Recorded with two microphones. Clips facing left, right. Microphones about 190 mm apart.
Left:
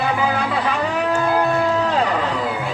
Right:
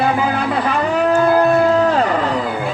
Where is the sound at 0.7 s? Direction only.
45° right (ahead or behind).